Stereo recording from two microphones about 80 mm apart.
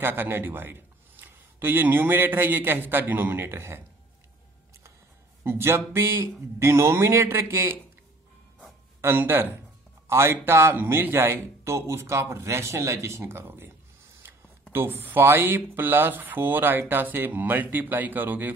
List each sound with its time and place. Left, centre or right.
0.0 s a man's voice: right
5.4 s speech: right
9.0 s speech: right
14.7 s speech: right